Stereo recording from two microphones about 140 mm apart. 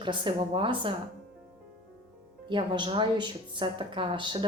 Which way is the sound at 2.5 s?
35° right (ahead or behind).